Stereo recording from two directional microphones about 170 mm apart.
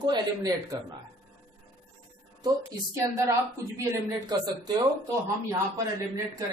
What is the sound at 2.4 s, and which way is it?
A woman's voice, 15° right (ahead or behind).